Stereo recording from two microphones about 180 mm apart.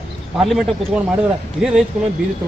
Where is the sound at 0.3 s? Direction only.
Centre (ahead or behind).